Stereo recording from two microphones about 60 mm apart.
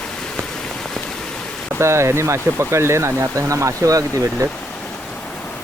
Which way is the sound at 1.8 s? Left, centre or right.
Right.